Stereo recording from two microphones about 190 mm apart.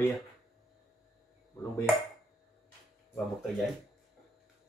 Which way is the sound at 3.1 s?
Centre (ahead or behind).